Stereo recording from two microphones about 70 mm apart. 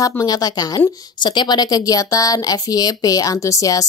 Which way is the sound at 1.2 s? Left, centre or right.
Left.